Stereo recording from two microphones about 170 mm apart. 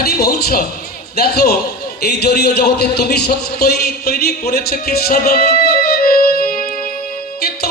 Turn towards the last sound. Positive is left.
turn(degrees=65)  # may be behind; listen again after turning